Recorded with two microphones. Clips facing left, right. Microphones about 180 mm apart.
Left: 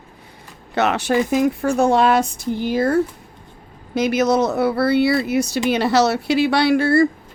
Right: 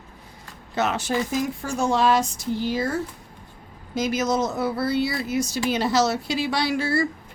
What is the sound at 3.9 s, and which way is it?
Speech, 65° left (ahead or behind).